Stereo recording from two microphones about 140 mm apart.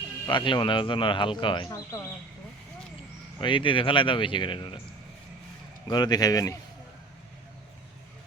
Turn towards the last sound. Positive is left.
turn(degrees=25)  # may be behind; listen again after turning